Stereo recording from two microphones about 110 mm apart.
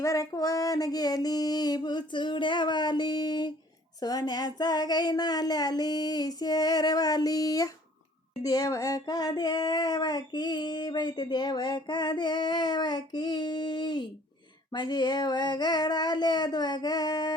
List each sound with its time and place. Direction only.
0.0 s child singing: 30° left (ahead or behind)